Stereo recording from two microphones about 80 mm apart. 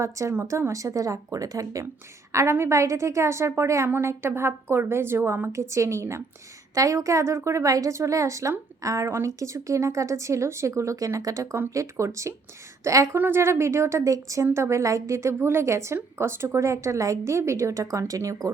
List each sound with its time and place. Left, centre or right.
0.0 s a woman's voice: right
13.1 s a woman's voice: right